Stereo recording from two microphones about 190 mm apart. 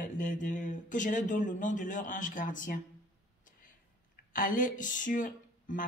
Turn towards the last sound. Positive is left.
turn(degrees=45)  # may be behind; listen again after turning